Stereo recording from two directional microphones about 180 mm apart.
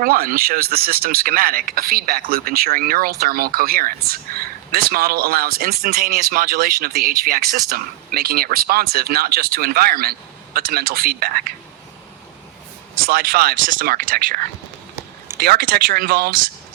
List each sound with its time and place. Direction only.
0.0 s speech: 55° right (ahead or behind)
13.0 s speech: 55° right (ahead or behind)